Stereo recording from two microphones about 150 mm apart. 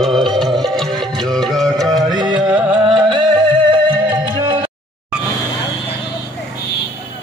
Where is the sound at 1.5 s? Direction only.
Centre (ahead or behind).